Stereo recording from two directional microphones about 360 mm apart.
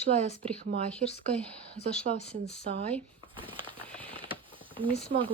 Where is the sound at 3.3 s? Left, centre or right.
Centre.